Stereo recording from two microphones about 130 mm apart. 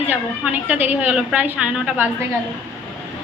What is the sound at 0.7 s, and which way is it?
A woman's voice, 15° right (ahead or behind).